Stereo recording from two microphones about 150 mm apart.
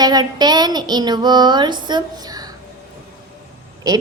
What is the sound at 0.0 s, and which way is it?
A woman's voice, 25° right (ahead or behind).